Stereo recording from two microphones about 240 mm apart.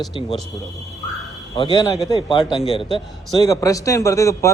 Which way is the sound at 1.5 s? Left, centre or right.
Centre.